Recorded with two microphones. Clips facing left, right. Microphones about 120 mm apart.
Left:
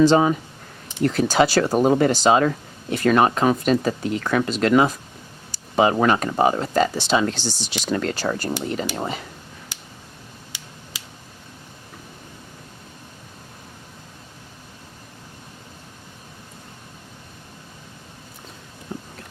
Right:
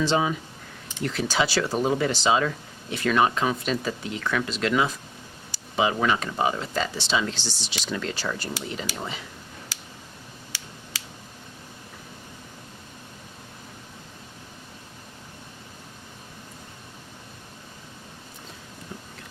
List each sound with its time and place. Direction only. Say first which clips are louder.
0.0 s speech: left 8 dB; 45° left (ahead or behind)
10.5 s scissors: right 2 dB; 15° left (ahead or behind)